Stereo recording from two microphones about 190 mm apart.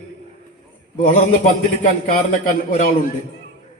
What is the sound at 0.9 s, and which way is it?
A man's voice, 45° left (ahead or behind).